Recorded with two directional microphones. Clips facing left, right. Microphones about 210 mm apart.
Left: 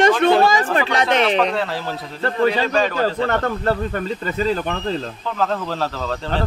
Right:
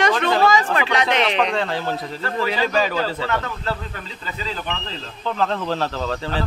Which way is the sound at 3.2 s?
50° left (ahead or behind).